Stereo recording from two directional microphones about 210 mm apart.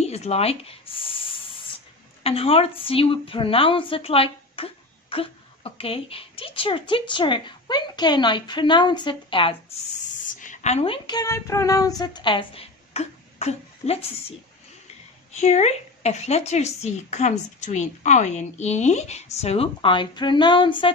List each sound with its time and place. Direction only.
0.0 s speech: 30° left (ahead or behind)
10.2 s a woman's voice: 35° left (ahead or behind)
15.3 s speech: 35° left (ahead or behind)